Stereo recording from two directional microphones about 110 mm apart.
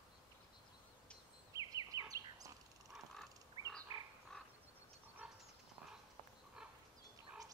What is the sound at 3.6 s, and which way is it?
Frog, 55° left (ahead or behind).